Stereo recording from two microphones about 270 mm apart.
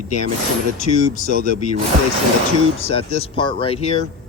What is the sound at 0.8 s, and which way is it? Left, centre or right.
Speech, left.